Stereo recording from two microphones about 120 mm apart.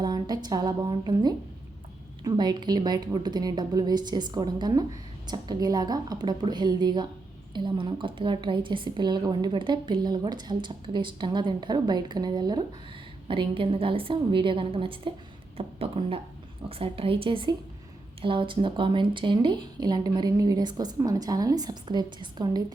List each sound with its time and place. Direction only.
0.0 s a woman's voice: 35° right (ahead or behind)